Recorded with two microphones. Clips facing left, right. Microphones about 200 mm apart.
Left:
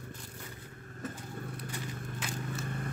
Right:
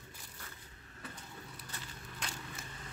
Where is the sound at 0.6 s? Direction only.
50° left (ahead or behind).